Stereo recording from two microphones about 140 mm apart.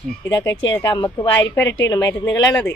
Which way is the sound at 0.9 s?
35° left (ahead or behind).